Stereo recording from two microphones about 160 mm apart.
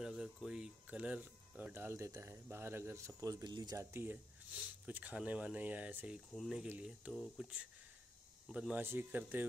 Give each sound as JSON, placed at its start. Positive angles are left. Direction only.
{"t": 0.0, "sound": "speech", "side_deg": -5}